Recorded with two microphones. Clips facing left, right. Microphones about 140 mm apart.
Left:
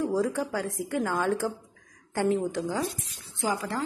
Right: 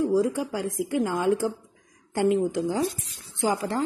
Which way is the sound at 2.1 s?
15° right (ahead or behind).